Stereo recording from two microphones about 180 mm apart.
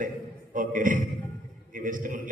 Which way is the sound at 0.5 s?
45° right (ahead or behind).